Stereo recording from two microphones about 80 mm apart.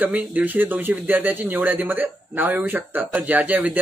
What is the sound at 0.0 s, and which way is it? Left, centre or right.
Speech, right.